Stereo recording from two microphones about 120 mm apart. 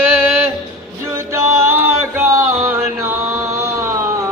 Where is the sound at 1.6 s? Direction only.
20° right (ahead or behind).